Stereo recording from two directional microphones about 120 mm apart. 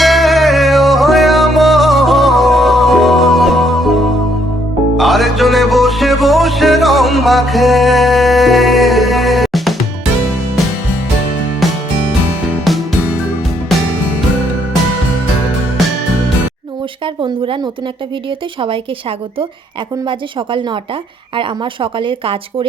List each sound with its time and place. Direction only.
0.0 s music: centre (ahead or behind)
11.6 s music: centre (ahead or behind)
17.2 s a sound: 45° right (ahead or behind)
20.1 s speech: 45° right (ahead or behind)